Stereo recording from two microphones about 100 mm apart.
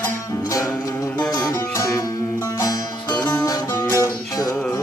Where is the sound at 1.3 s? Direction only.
40° left (ahead or behind).